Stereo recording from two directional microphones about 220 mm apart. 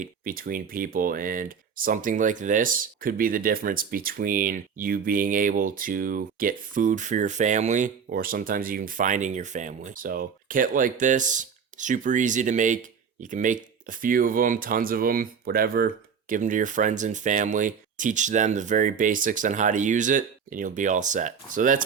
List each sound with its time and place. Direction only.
0.0 s speech: 40° right (ahead or behind)